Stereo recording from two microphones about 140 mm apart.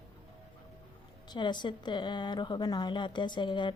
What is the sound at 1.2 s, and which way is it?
Speech, 35° left (ahead or behind).